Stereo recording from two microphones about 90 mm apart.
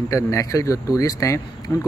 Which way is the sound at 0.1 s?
35° left (ahead or behind).